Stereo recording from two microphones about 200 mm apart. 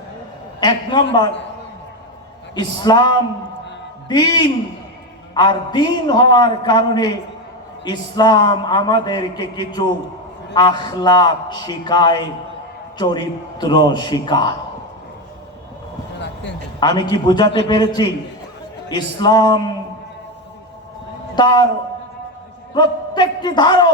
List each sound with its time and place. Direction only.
0.6 s a man's voice: 20° left (ahead or behind)
2.6 s a man's voice: 20° left (ahead or behind)
16.8 s a man's voice: 20° left (ahead or behind)
21.3 s a man's voice: 20° left (ahead or behind)
22.7 s a man's voice: 20° left (ahead or behind)